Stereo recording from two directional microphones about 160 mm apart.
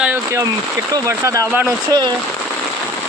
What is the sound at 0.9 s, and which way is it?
Speech, 20° right (ahead or behind).